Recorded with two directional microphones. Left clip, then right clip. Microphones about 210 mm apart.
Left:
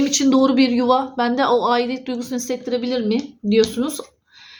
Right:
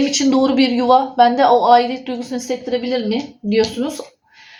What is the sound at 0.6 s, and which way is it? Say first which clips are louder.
Speech: right 1 dB; 25° left (ahead or behind).